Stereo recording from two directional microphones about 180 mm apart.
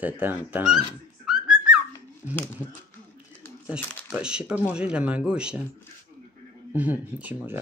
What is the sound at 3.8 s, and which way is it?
Speech, 10° left (ahead or behind).